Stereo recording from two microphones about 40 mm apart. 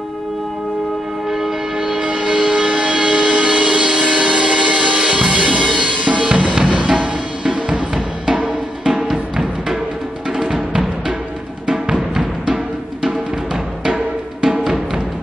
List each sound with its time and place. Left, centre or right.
1.3 s train: centre
2.0 s music: right
6.2 s drum: right
7.9 s music: centre
13.8 s music: centre